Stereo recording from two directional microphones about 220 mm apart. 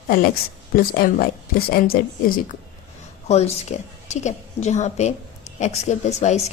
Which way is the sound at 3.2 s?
30° left (ahead or behind).